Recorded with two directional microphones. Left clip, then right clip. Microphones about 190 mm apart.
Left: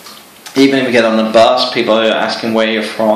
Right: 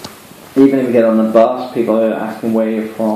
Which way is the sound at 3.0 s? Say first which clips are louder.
Left 6 dB; 50° left (ahead or behind).